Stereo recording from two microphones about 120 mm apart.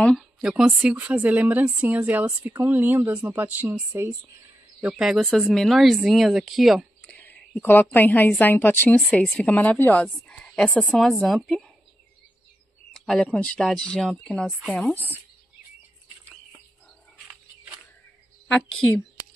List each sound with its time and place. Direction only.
0.4 s speech: 5° right (ahead or behind)
4.8 s speech: 5° right (ahead or behind)
7.1 s a woman's voice: 15° left (ahead or behind)
12.9 s speech: 5° left (ahead or behind)
18.5 s speech: centre (ahead or behind)